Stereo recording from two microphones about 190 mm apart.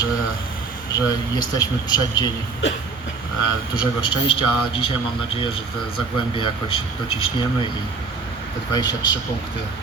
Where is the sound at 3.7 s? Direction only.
25° left (ahead or behind).